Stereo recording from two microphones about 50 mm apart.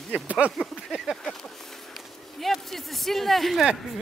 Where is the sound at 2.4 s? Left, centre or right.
Centre.